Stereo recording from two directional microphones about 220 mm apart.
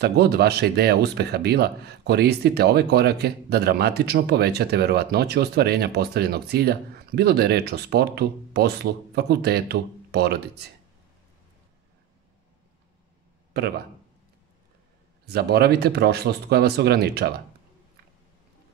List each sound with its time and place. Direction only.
0.0 s speech: 45° right (ahead or behind)
13.5 s speech: 45° right (ahead or behind)
15.2 s speech: 45° right (ahead or behind)